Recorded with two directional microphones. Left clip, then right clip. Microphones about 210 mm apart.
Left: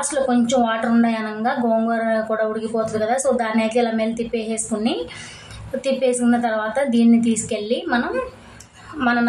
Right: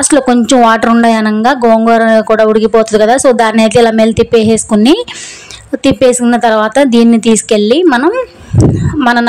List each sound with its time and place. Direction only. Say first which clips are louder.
0.1 s a woman's voice: right 11 dB; 45° right (ahead or behind)
9.0 s music: right 10 dB; 40° right (ahead or behind)